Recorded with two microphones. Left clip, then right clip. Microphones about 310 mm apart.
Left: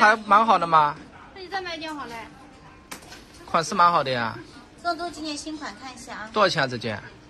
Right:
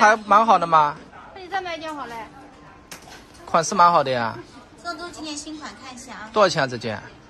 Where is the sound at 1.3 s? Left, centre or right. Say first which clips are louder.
Right 3 dB; right.